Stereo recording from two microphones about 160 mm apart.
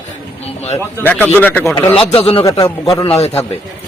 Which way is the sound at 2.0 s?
35° left (ahead or behind).